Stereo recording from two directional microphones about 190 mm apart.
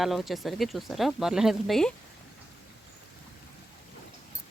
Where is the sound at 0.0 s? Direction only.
Centre (ahead or behind).